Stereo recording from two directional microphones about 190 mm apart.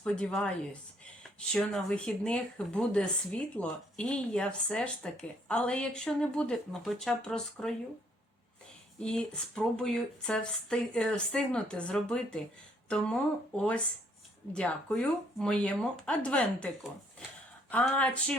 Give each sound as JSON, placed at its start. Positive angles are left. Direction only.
{"t": 0.0, "sound": "speech", "side_deg": 5}
{"t": 9.0, "sound": "speech", "side_deg": 5}